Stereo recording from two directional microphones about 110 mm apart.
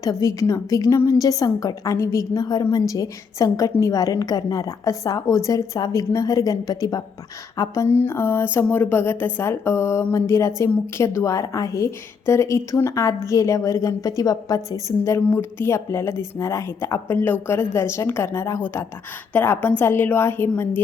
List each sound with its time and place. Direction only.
0.0 s a woman's voice: 30° left (ahead or behind)
7.9 s a woman's voice: 20° left (ahead or behind)